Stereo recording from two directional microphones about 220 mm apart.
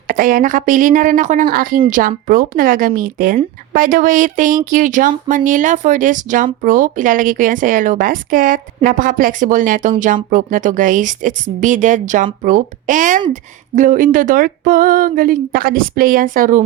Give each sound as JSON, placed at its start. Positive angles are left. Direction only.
{"t": 0.1, "sound": "a woman's voice", "side_deg": -40}